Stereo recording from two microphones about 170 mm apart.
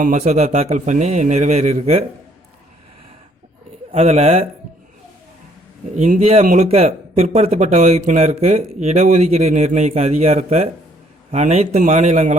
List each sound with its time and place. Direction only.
0.0 s speech: 45° right (ahead or behind)
3.9 s speech: 35° right (ahead or behind)
6.0 s speech: 45° right (ahead or behind)